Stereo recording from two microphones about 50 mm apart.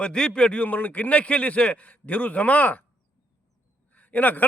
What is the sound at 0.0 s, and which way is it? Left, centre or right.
A man's voice, centre.